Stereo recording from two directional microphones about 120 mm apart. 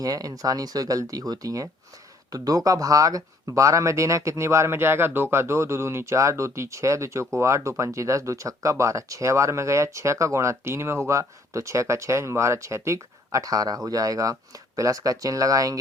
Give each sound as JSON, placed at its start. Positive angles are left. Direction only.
{"t": 0.0, "sound": "speech", "side_deg": -30}